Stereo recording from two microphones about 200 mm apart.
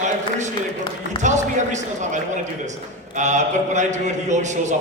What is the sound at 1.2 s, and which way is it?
Speech, 35° right (ahead or behind).